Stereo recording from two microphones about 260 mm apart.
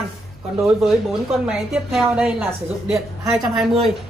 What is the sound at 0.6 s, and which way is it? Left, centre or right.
Speech, centre.